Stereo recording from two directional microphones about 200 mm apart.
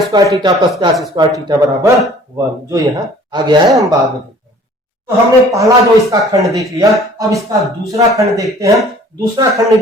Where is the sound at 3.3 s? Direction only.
20° right (ahead or behind).